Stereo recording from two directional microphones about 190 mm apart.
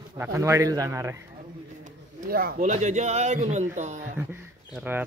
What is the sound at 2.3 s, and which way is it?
Speech, 50° right (ahead or behind).